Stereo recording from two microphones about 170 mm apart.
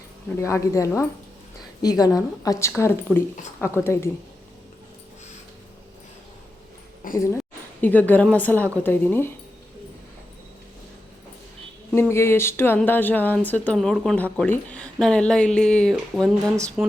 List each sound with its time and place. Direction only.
0.3 s speech: 15° left (ahead or behind)
7.0 s a sound: 55° left (ahead or behind)
7.8 s speech: 10° left (ahead or behind)
11.9 s speech: 15° left (ahead or behind); by 16.9 s 5° right (ahead or behind)